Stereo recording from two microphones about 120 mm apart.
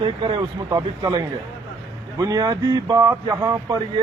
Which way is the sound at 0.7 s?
35° right (ahead or behind).